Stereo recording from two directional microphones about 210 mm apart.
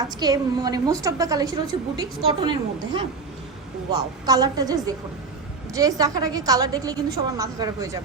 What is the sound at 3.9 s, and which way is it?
A woman's voice, 20° right (ahead or behind).